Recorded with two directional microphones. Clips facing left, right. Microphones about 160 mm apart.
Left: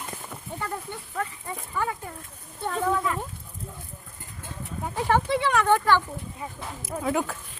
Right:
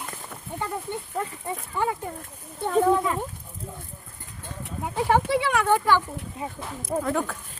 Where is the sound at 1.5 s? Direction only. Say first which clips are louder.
Right 3 dB; 25° right (ahead or behind).